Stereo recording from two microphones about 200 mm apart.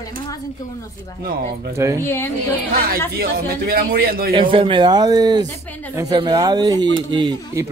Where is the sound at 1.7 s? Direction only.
15° right (ahead or behind).